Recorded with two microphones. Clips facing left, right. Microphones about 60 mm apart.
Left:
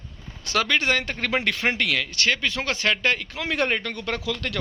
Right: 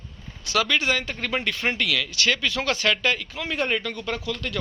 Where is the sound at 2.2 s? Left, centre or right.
Left.